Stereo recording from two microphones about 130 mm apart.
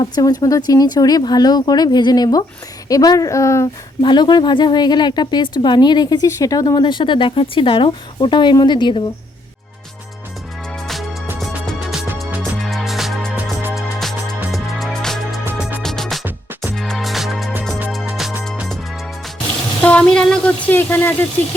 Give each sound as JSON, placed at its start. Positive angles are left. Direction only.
{"t": 0.0, "sound": "a woman's voice", "side_deg": 30}
{"t": 4.0, "sound": "a woman's voice", "side_deg": 35}
{"t": 11.3, "sound": "music", "side_deg": 0}
{"t": 13.3, "sound": "music", "side_deg": -15}
{"t": 13.7, "sound": "music", "side_deg": 0}
{"t": 19.8, "sound": "a sound", "side_deg": 10}